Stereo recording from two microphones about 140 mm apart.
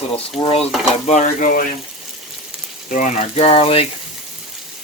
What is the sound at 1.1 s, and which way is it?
Frying, 65° left (ahead or behind).